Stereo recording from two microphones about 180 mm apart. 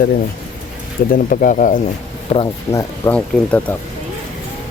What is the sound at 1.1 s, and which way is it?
Speech, 50° left (ahead or behind).